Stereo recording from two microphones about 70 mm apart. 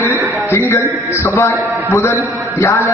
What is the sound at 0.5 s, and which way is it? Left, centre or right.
A man's voice, left.